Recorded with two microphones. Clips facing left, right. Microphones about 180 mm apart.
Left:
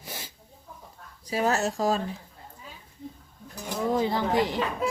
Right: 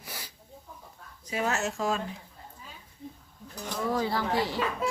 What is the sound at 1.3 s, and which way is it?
Speech, 35° left (ahead or behind).